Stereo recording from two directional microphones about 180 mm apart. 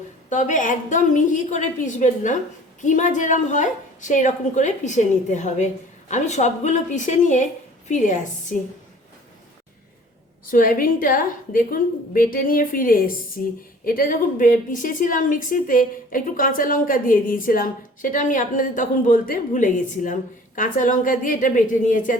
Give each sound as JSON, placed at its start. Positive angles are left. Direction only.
{"t": 0.3, "sound": "a woman's voice", "side_deg": 45}
{"t": 10.4, "sound": "a woman's voice", "side_deg": 50}